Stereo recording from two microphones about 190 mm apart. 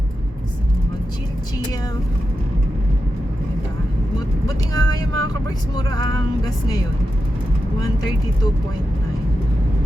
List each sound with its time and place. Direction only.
4.4 s vehicle: 20° left (ahead or behind)